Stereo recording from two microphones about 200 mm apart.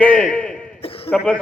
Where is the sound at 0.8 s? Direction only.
30° left (ahead or behind).